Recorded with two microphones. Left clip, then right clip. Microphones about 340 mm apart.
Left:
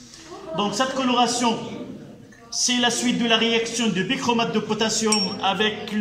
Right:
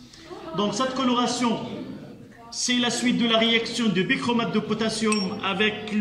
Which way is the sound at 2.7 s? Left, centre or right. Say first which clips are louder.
Left 1 dB; centre.